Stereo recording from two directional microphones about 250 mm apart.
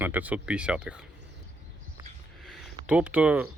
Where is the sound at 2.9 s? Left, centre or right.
Centre.